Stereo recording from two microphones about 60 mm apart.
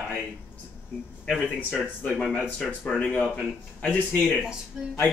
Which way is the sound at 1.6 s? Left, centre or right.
Left.